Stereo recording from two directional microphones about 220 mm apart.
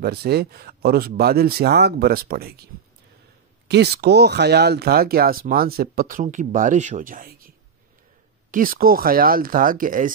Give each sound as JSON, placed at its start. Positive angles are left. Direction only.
{"t": 0.0, "sound": "speech", "side_deg": -45}
{"t": 3.6, "sound": "speech", "side_deg": -50}